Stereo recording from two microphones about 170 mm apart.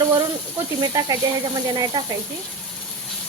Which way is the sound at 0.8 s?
20° right (ahead or behind).